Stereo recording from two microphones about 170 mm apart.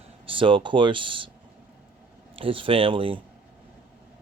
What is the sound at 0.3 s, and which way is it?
Speech, 30° right (ahead or behind).